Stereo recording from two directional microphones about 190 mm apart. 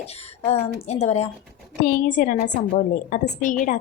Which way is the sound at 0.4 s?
35° left (ahead or behind).